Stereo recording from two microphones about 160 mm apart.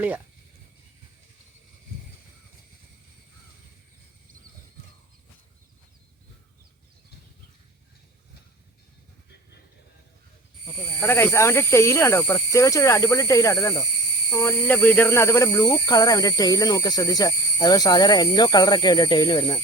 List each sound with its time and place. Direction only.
11.0 s speech: 15° left (ahead or behind)